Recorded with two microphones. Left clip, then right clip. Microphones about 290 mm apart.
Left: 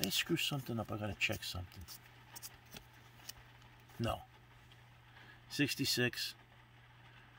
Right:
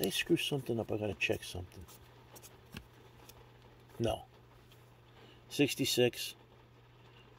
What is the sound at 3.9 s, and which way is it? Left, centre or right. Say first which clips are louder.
Speech: right 5 dB; left.